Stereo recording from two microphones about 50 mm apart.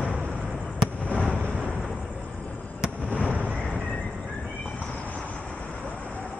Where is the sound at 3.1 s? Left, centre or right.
Left.